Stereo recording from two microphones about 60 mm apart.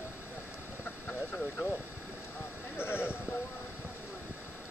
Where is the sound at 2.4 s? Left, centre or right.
Left.